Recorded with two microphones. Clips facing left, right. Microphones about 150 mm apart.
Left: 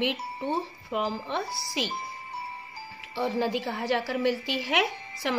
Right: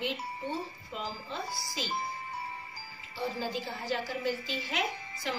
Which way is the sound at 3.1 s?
70° left (ahead or behind).